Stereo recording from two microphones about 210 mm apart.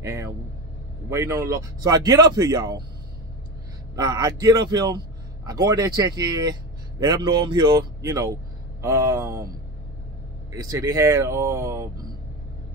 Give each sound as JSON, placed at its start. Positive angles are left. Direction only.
{"t": 0.0, "sound": "speech", "side_deg": -15}
{"t": 3.9, "sound": "a man's voice", "side_deg": -20}
{"t": 10.5, "sound": "speech", "side_deg": -15}